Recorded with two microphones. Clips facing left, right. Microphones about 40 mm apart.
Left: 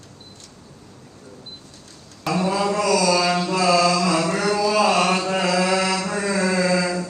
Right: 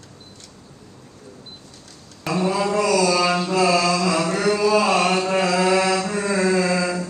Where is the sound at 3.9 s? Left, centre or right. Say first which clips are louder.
Even; right.